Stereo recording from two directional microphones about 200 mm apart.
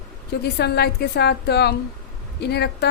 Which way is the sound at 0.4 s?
55° left (ahead or behind).